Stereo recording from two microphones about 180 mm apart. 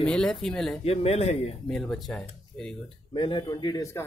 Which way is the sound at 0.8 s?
35° left (ahead or behind).